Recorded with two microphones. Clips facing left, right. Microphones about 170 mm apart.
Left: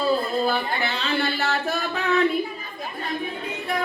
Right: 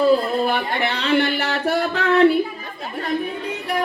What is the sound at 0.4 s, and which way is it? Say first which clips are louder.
Speech: right 3 dB; 65° right (ahead or behind).